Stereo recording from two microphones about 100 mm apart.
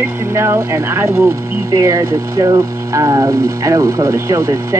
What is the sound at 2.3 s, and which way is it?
Speech, 45° right (ahead or behind).